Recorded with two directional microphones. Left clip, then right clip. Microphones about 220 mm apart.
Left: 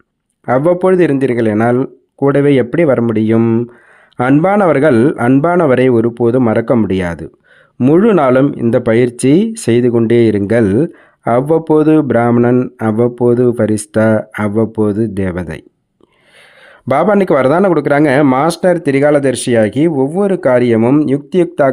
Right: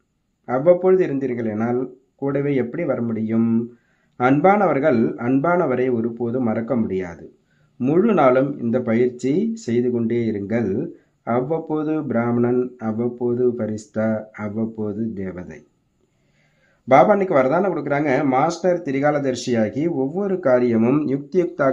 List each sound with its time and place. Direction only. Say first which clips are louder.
0.4 s speech: left 5 dB; 45° left (ahead or behind)
16.9 s speech: left 3 dB; 45° left (ahead or behind)